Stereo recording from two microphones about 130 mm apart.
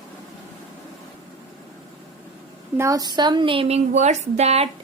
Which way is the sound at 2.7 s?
25° right (ahead or behind).